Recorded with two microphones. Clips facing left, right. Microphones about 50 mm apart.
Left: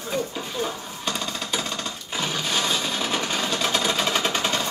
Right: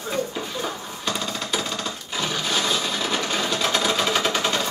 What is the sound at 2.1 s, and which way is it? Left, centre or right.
Sewing machine, centre.